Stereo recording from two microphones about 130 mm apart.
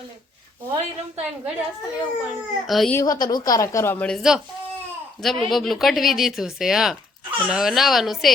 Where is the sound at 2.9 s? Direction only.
25° left (ahead or behind).